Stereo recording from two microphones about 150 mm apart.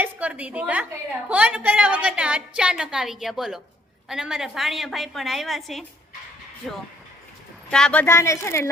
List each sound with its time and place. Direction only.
0.0 s a woman's voice: 10° right (ahead or behind)
7.7 s a woman's voice: 5° left (ahead or behind)
8.0 s speech: 20° left (ahead or behind)